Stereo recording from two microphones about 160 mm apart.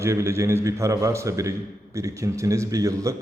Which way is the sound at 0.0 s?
20° right (ahead or behind).